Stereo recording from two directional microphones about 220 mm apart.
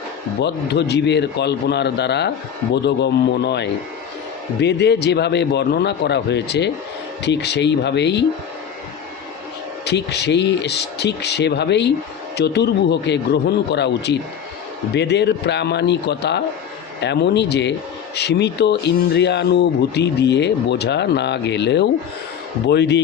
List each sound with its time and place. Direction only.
0.3 s speech: 50° left (ahead or behind)
9.8 s speech: 50° left (ahead or behind)